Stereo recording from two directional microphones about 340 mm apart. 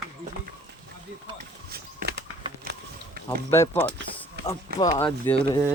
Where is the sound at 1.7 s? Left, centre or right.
Right.